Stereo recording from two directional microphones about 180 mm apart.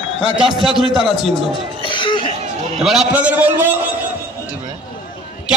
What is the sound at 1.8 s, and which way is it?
Cough, 25° left (ahead or behind).